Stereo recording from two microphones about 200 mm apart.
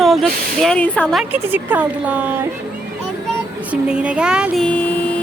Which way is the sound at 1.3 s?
10° right (ahead or behind).